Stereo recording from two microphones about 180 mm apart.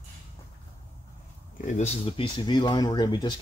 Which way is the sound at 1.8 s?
30° left (ahead or behind).